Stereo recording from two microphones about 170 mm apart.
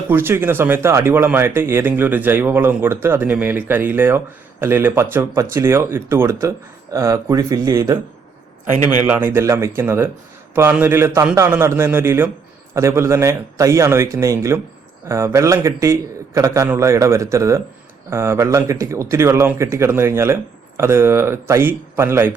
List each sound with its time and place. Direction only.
0.1 s speech: 15° right (ahead or behind)
9.0 s speech: 10° right (ahead or behind)